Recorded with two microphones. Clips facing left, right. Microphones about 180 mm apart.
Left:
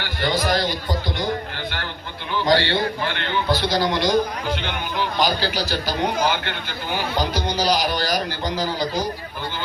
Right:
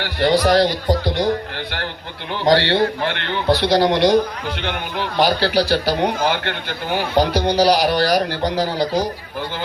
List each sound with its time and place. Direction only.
0.0 s a man's voice: 75° right (ahead or behind)
2.4 s a man's voice: 70° right (ahead or behind)